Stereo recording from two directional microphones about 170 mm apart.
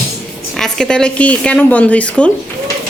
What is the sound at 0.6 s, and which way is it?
A woman's voice, 5° left (ahead or behind).